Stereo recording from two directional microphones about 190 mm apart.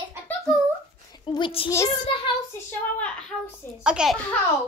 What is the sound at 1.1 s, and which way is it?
Speech, 25° left (ahead or behind).